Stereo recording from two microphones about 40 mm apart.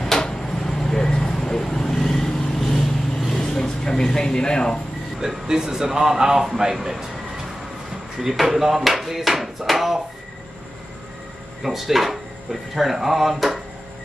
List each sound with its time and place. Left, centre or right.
0.0 s a sound: centre
0.7 s vehicle: centre
3.4 s a sound: centre
5.2 s speech: centre
8.2 s speech: centre
11.6 s speech: centre